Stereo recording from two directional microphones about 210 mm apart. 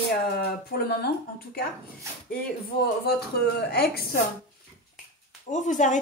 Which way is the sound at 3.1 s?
50° left (ahead or behind).